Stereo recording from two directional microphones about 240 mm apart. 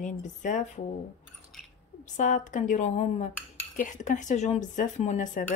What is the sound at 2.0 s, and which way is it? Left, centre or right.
Speech, left.